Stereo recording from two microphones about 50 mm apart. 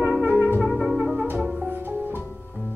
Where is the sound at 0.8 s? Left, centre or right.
Centre.